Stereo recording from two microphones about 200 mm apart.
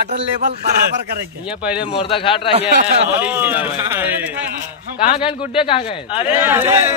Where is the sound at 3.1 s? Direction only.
10° right (ahead or behind).